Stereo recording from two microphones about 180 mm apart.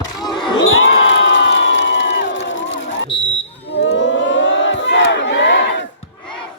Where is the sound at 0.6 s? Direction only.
90° left.